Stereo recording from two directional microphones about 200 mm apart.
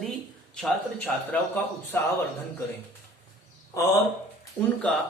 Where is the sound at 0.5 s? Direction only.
5° left (ahead or behind).